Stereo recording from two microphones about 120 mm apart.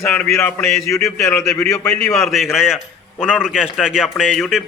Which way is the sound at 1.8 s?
10° left (ahead or behind).